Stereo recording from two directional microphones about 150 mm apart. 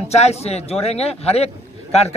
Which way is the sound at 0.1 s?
45° left (ahead or behind).